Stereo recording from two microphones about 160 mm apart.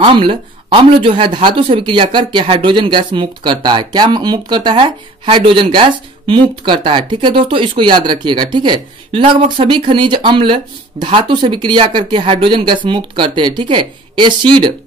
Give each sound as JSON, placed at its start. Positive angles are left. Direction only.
{"t": 0.0, "sound": "speech", "side_deg": -35}